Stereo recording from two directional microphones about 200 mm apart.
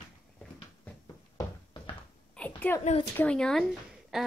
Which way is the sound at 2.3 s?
10° left (ahead or behind).